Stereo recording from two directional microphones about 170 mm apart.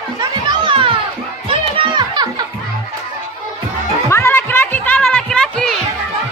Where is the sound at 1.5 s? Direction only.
30° right (ahead or behind).